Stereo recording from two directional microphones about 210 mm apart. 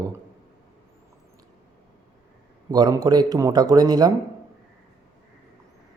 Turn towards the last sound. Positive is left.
turn(degrees=-20)  # may be behind; listen again after turning